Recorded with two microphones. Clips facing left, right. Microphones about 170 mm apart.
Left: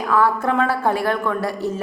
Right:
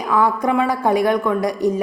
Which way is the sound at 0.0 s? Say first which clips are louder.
Right 1 dB; 15° right (ahead or behind).